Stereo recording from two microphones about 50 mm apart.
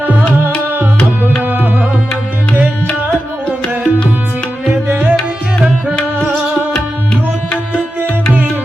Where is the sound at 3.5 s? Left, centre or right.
Left.